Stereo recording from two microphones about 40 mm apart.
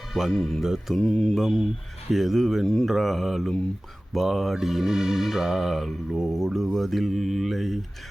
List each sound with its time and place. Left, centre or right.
0.1 s speech: centre
0.3 s speech: centre
0.6 s music: centre
0.9 s mantra: centre
1.4 s speech: centre
4.9 s music: centre
6.7 s speech: centre